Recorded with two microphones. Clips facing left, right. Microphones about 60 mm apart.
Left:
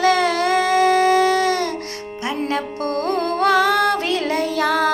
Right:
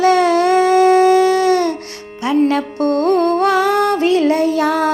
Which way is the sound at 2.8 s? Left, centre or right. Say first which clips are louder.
Right 9 dB; right.